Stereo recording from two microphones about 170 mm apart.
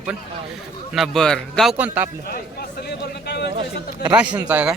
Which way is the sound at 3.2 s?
75° left (ahead or behind).